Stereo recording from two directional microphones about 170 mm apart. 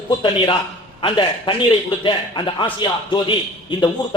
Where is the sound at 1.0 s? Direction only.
30° left (ahead or behind).